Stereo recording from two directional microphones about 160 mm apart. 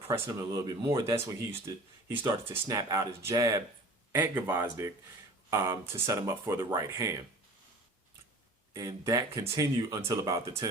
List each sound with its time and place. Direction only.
0.1 s speech: 20° right (ahead or behind)
8.7 s speech: 20° right (ahead or behind)